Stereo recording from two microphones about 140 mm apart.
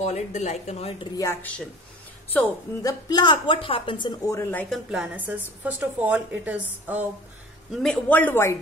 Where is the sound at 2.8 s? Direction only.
30° left (ahead or behind).